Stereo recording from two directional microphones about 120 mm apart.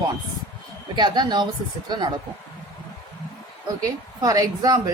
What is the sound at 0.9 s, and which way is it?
Speech, 35° right (ahead or behind).